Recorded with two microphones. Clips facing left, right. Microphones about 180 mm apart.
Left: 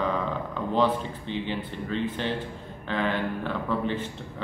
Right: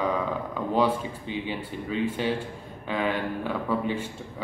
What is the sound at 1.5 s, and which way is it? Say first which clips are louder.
Speech: even; 10° right (ahead or behind).